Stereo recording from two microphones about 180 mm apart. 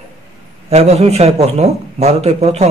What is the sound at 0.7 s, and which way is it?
A man's voice, 35° right (ahead or behind).